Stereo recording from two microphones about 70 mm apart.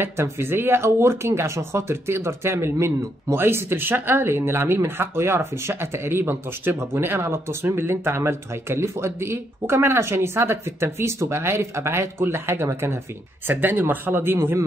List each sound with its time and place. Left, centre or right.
0.0 s speech: right
13.5 s speech: right